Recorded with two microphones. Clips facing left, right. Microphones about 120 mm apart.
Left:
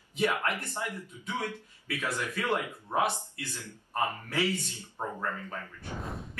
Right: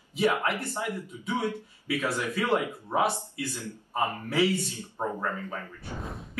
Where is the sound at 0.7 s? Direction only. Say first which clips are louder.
Right 4 dB; 15° right (ahead or behind); by 6.4 s centre (ahead or behind).